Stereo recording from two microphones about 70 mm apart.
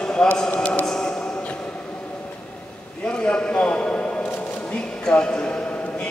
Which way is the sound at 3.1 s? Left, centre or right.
Centre.